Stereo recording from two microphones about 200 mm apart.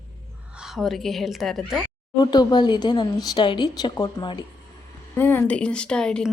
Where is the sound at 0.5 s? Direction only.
Centre (ahead or behind).